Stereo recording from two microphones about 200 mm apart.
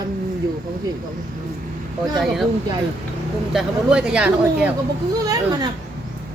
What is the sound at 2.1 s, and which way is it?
Speech, centre (ahead or behind).